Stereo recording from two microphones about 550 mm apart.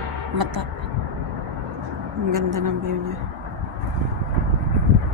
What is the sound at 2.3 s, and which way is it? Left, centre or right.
Speech, right.